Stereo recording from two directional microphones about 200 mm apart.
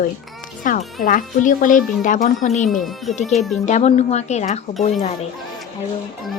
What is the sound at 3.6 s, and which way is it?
Speech, 35° left (ahead or behind).